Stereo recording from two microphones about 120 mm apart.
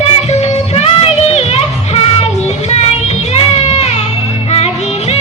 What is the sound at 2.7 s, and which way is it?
Child singing, 60° left (ahead or behind).